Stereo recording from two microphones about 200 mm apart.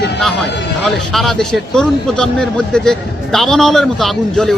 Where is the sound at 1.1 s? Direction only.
Centre (ahead or behind).